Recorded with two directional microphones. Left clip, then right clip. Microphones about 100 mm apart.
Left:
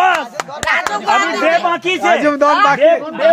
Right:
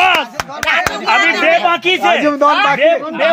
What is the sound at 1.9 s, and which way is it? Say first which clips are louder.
Speech: even; 5° left (ahead or behind).